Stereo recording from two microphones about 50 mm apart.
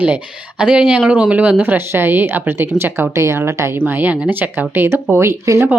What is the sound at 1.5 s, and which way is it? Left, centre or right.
Speech, right.